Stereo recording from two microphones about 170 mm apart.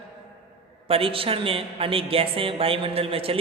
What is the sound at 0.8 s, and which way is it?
A woman's voice, 35° right (ahead or behind).